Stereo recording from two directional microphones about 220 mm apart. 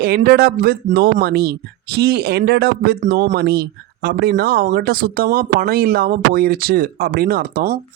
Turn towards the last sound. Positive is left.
turn(degrees=-45)  # may be behind; listen again after turning